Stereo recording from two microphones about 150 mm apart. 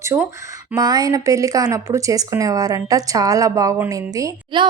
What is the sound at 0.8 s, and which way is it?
Speech, 25° right (ahead or behind).